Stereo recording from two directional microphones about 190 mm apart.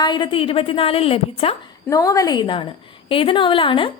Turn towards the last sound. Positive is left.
turn(degrees=25)  # may be behind; listen again after turning